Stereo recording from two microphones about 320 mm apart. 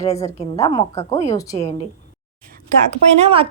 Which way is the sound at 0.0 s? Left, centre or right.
Centre.